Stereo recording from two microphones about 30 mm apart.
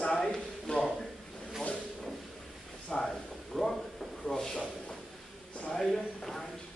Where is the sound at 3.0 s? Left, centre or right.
Centre.